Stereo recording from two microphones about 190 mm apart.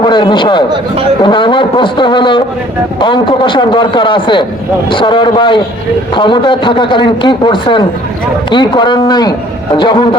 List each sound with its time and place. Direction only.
0.0 s a man's voice: 25° left (ahead or behind)